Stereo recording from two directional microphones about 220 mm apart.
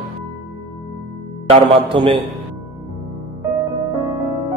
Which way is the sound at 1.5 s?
25° right (ahead or behind).